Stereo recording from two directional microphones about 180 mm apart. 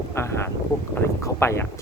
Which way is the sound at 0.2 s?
15° left (ahead or behind).